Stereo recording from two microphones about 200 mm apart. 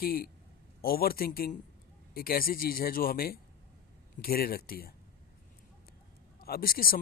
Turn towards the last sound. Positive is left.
turn(degrees=45)  # may be behind; listen again after turning